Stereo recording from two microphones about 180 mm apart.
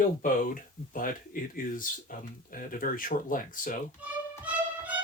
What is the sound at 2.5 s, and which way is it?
Speech, 50° left (ahead or behind).